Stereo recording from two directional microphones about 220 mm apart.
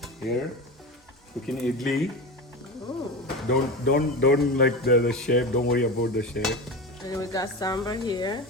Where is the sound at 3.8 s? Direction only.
45° left (ahead or behind).